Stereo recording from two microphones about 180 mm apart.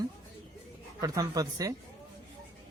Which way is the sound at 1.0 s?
20° right (ahead or behind).